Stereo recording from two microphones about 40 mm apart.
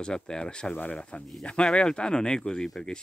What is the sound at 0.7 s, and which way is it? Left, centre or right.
Speech, left.